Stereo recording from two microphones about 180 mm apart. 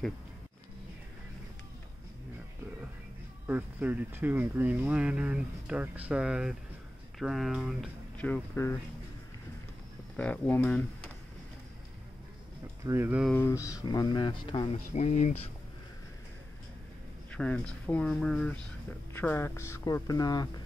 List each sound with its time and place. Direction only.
3.4 s speech: 10° right (ahead or behind)
8.2 s speech: 10° left (ahead or behind)
10.1 s speech: 10° left (ahead or behind)
12.8 s speech: 15° right (ahead or behind)
13.4 s speech: 20° left (ahead or behind)
15.0 s speech: 40° left (ahead or behind)
17.3 s speech: 5° left (ahead or behind); by 20.4 s 20° left (ahead or behind)